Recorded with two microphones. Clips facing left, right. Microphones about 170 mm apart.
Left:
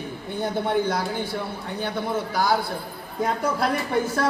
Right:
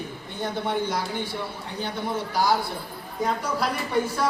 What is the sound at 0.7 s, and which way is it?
Speech, 55° left (ahead or behind).